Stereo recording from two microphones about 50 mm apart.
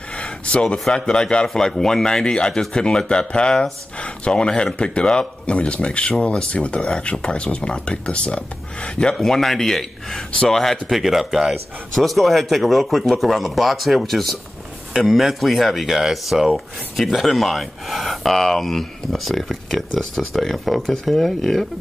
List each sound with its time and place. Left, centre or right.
0.2 s a sound: left
0.9 s speech: centre
9.2 s speech: centre
11.9 s speech: centre